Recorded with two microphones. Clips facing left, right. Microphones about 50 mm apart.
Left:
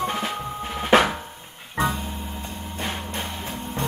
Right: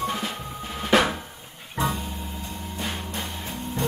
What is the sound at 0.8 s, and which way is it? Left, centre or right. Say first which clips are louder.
Drum: left 3 dB; left.